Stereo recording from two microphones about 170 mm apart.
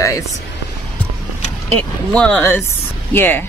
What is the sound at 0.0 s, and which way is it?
Speech, 20° left (ahead or behind).